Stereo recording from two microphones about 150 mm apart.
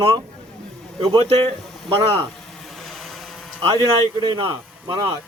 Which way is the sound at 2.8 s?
Centre (ahead or behind).